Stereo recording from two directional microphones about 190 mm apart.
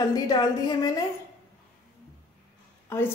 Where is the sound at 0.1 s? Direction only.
20° left (ahead or behind).